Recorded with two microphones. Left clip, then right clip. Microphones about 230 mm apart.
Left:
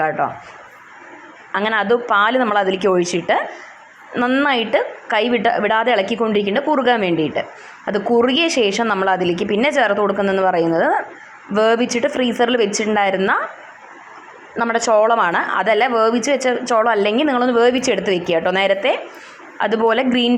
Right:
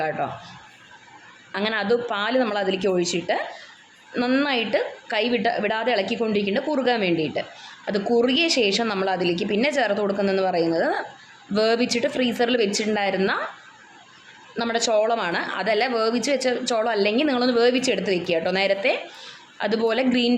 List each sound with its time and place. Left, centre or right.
0.2 s speech: centre
1.5 s a woman's voice: centre
14.5 s a woman's voice: centre
17.2 s a woman's voice: centre
17.6 s a woman's voice: centre